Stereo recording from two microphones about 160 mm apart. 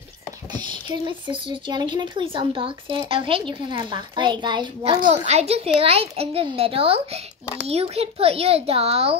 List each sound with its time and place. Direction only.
0.5 s speech: 30° right (ahead or behind)
5.1 s speech: 40° right (ahead or behind)